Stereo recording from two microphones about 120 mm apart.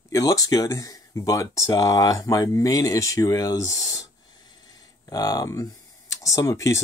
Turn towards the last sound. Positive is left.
turn(degrees=25)  # may be behind; listen again after turning